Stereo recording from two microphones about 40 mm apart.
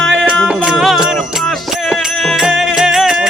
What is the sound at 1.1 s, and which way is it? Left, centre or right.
Music, centre.